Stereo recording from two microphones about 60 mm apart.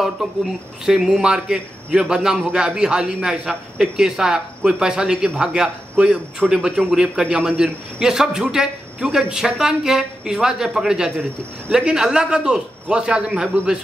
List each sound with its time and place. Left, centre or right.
0.0 s speech: centre
6.4 s a man's voice: centre
6.9 s speech: centre